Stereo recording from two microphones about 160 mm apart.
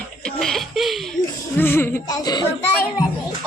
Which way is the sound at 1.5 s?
15° left (ahead or behind).